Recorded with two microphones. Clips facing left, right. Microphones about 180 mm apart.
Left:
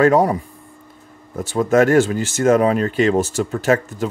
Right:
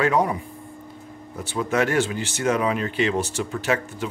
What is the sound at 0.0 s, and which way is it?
Speech, 40° left (ahead or behind).